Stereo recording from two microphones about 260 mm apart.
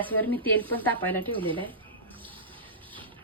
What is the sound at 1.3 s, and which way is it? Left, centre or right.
Speech, centre.